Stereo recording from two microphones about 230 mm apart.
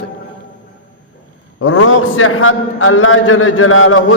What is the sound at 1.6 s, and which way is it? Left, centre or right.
A man's voice, left.